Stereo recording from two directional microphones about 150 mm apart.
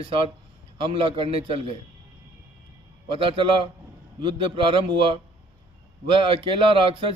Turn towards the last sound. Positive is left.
turn(degrees=-35)  # may be behind; listen again after turning